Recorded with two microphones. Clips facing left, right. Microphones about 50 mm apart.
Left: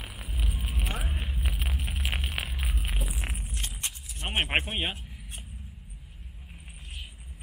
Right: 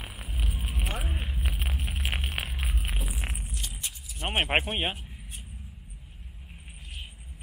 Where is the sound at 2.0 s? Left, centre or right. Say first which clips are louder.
Right 1 dB; right.